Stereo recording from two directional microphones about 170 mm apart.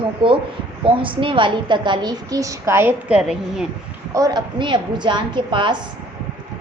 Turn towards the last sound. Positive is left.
turn(degrees=-30)  # may be behind; listen again after turning